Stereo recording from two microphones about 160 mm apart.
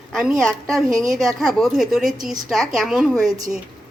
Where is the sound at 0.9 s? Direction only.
20° right (ahead or behind).